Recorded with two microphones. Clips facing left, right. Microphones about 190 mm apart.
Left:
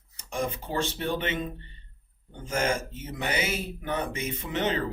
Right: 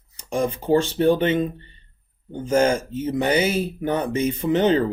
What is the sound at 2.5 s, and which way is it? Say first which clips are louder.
Speech: right 9 dB; 30° right (ahead or behind).